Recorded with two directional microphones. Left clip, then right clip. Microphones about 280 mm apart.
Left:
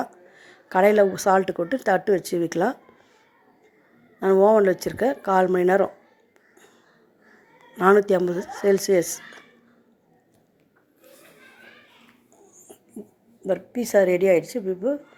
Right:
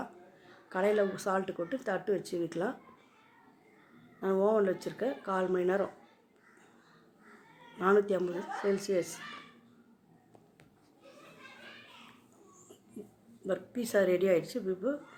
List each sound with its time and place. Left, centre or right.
0.0 s speech: left
4.2 s speech: left
7.8 s speech: left
13.5 s speech: centre